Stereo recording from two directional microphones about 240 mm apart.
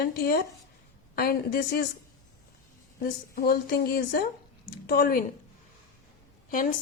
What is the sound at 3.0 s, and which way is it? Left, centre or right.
A woman's voice, left.